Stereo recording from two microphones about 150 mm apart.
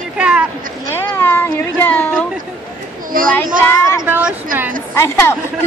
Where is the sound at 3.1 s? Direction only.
65° right (ahead or behind).